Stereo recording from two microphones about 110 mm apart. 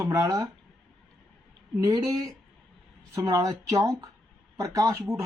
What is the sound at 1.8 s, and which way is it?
Speech, 35° right (ahead or behind).